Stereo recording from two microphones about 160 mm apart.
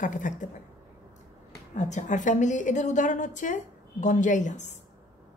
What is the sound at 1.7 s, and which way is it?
A woman's voice, 50° left (ahead or behind).